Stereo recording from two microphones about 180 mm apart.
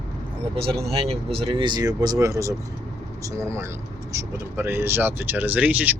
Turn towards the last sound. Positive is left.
turn(degrees=-10)  # may be behind; listen again after turning